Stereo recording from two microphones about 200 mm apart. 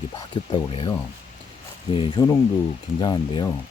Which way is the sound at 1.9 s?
25° left (ahead or behind).